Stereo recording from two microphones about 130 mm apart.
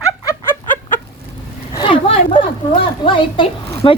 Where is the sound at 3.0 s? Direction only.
40° left (ahead or behind).